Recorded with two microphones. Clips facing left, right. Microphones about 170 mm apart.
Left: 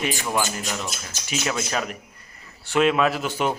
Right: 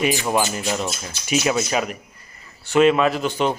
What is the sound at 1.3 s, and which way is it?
A man's voice, 10° right (ahead or behind).